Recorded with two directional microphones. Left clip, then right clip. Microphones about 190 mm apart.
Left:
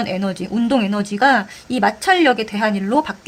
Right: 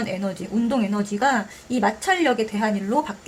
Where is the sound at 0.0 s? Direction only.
40° left (ahead or behind).